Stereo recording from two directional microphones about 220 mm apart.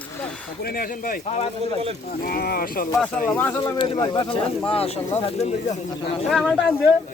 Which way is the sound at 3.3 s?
10° left (ahead or behind).